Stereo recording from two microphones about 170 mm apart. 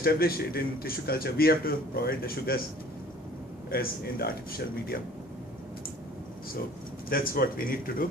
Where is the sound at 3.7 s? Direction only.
60° left (ahead or behind).